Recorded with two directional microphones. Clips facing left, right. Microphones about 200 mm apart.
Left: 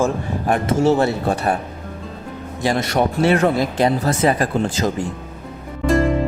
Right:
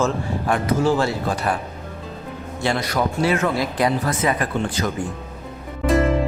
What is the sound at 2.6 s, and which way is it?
A man's voice, 25° left (ahead or behind).